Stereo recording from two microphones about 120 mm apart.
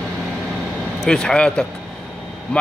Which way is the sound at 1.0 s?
5° left (ahead or behind).